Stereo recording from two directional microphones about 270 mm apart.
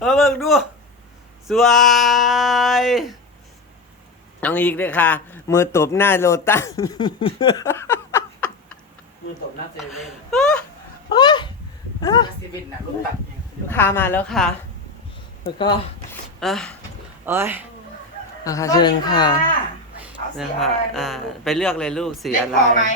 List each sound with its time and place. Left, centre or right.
0.0 s speech: centre
4.4 s a man's voice: centre
9.7 s speech: centre
11.1 s a sound: centre
12.0 s a man's voice: centre
13.7 s a man's voice: centre
15.4 s a man's voice: centre
16.4 s speech: centre
18.4 s a man's voice: centre
20.3 s speech: centre
22.3 s speech: left